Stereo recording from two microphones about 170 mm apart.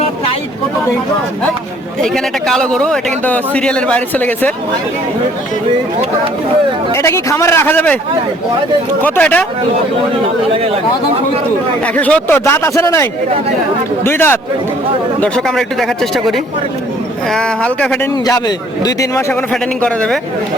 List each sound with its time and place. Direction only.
2.0 s speech: 5° left (ahead or behind)
6.9 s speech: 15° left (ahead or behind)
9.0 s speech: 10° left (ahead or behind)
11.9 s speech: 10° left (ahead or behind)
15.2 s speech: centre (ahead or behind)
17.3 s speech: 5° left (ahead or behind)
18.3 s a man's voice: 20° left (ahead or behind)
19.8 s speech: 5° left (ahead or behind)